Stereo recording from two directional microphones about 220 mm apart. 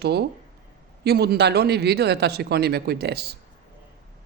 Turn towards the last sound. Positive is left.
turn(degrees=-45)  # may be behind; listen again after turning